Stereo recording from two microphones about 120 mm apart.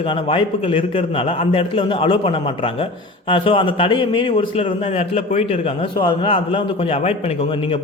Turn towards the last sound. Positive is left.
turn(degrees=60)  # may be behind; listen again after turning